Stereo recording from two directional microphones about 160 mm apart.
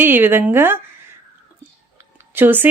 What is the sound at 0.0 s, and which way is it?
Speech, 15° right (ahead or behind).